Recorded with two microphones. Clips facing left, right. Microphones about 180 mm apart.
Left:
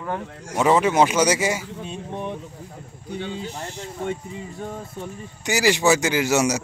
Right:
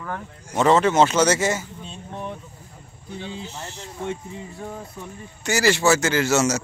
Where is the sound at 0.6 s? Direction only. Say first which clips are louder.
Right 1 dB; 10° left (ahead or behind).